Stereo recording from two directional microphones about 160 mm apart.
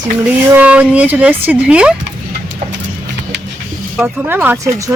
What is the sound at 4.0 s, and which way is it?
Speech, 15° right (ahead or behind).